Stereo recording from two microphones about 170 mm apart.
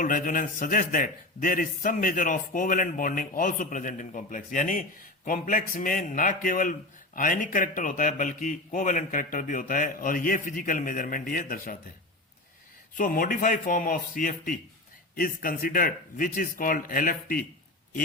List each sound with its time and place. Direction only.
0.0 s a man's voice: 50° left (ahead or behind)
13.0 s a man's voice: 55° left (ahead or behind)